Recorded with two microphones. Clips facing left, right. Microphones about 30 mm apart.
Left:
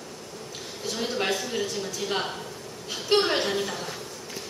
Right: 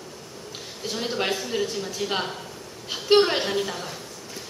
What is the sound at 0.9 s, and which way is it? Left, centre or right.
A woman's voice, centre.